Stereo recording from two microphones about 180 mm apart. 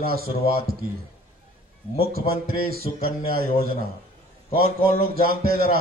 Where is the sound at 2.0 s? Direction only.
55° right (ahead or behind).